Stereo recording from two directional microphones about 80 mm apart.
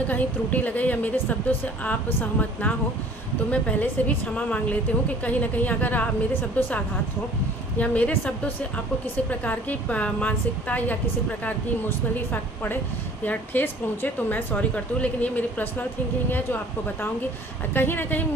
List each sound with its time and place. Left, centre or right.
0.1 s a woman's voice: left
9.3 s a woman's voice: centre
17.7 s a woman's voice: left